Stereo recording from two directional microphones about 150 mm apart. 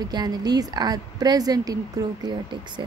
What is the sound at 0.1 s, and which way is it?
A woman's voice, 25° right (ahead or behind).